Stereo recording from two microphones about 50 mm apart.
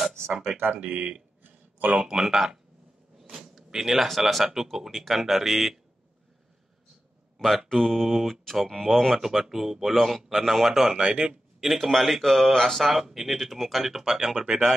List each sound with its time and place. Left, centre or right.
0.7 s speech: right
1.4 s a sound: right
2.0 s speech: centre
7.3 s speech: centre
11.0 s speech: centre
11.6 s speech: centre